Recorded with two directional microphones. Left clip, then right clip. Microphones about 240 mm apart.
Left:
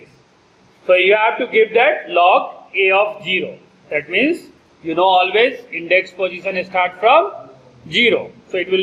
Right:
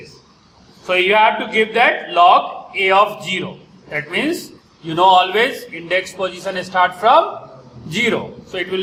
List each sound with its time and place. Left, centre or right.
0.9 s a man's voice: centre